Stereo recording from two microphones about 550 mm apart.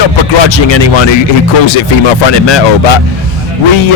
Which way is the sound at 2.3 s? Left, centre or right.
Left.